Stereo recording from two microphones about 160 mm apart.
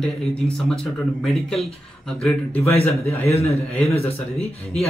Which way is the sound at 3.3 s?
40° left (ahead or behind).